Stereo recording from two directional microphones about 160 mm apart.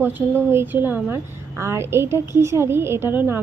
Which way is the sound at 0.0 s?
15° right (ahead or behind).